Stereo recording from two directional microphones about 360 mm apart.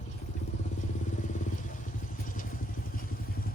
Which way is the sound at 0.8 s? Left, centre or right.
Centre.